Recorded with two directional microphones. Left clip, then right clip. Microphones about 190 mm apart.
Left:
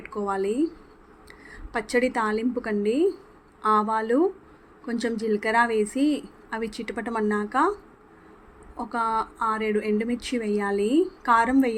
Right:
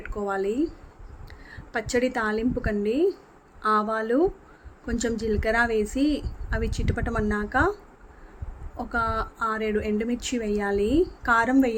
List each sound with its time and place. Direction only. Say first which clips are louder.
0.0 s speech: even; 5° left (ahead or behind)
8.8 s speech: left 1 dB; 5° left (ahead or behind)